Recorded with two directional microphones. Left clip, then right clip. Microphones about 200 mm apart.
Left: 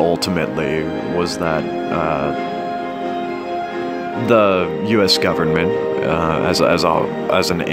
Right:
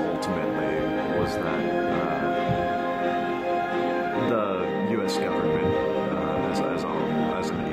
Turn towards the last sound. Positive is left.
turn(degrees=45)  # may be behind; listen again after turning